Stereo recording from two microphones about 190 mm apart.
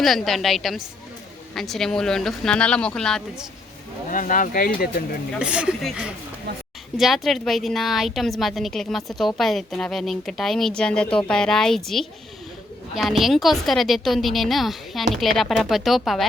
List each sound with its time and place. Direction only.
0.0 s a woman's voice: centre (ahead or behind)
4.1 s speech: 45° left (ahead or behind)
5.4 s a woman's voice: 5° right (ahead or behind)